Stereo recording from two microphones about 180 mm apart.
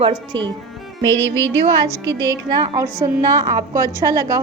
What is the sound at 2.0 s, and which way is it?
A woman's voice, 20° right (ahead or behind).